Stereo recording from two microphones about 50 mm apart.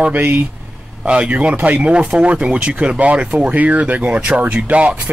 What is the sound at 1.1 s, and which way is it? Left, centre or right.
Speech, right.